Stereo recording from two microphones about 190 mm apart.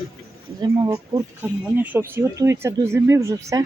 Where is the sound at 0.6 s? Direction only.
20° right (ahead or behind).